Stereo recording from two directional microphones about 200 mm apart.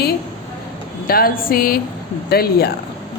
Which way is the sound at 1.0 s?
45° left (ahead or behind).